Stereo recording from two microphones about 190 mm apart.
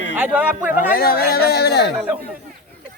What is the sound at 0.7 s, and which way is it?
Speech, 50° left (ahead or behind).